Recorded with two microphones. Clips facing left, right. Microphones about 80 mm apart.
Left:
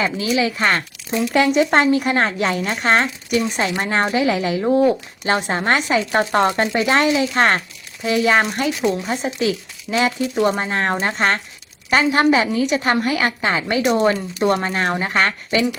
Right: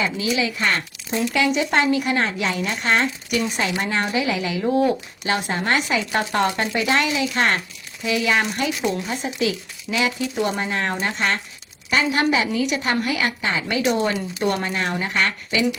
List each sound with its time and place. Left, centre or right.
0.0 s speech: left